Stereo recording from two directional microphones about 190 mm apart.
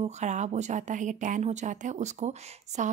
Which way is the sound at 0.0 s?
40° right (ahead or behind).